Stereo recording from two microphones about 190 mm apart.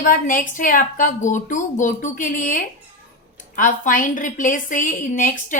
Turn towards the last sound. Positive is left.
turn(degrees=45)  # may be behind; listen again after turning